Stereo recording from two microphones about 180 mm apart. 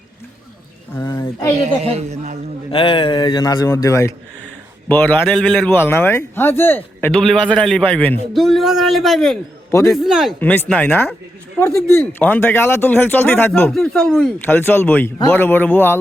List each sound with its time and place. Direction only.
0.9 s speech: 20° left (ahead or behind)
1.8 s a man's voice: 35° right (ahead or behind)
2.7 s a man's voice: 30° left (ahead or behind); by 10.3 s centre (ahead or behind)
10.4 s speech: 10° left (ahead or behind)